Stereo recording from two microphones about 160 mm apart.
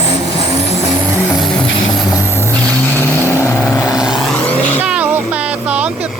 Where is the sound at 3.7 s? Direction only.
20° left (ahead or behind).